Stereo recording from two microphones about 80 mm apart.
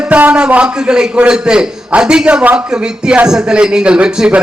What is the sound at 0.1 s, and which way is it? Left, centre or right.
A man's voice, centre.